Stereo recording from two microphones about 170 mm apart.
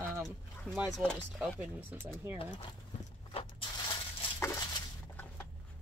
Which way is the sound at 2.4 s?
30° left (ahead or behind).